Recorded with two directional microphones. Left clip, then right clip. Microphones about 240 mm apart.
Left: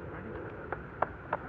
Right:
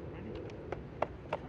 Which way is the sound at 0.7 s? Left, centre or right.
Right.